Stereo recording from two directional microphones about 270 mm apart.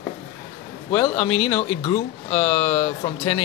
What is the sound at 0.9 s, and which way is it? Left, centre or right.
Speech, centre.